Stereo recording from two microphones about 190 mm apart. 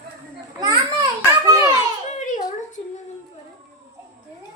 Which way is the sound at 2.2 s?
45° left (ahead or behind).